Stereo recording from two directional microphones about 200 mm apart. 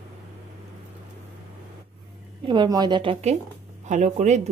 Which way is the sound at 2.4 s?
25° right (ahead or behind).